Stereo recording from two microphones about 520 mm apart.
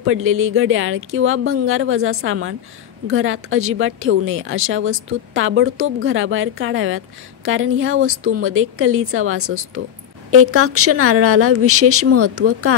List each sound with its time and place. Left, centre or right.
0.0 s a woman's voice: right